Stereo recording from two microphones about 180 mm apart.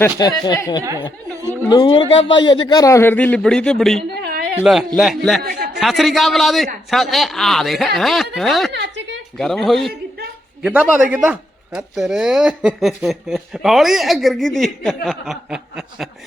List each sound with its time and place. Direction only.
0.0 s speech: 20° left (ahead or behind)
0.8 s speech: 15° right (ahead or behind)
1.7 s a man's voice: 25° left (ahead or behind); by 4.0 s centre (ahead or behind)
4.1 s a sound: 60° right (ahead or behind)
4.6 s speech: 5° right (ahead or behind)
5.4 s a sound: 55° right (ahead or behind)
5.8 s speech: centre (ahead or behind)
8.7 s a sound: 75° right (ahead or behind)
9.4 s a man's voice: centre (ahead or behind)